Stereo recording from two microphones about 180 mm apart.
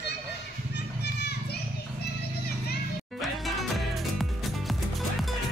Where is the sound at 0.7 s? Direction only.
65° left (ahead or behind).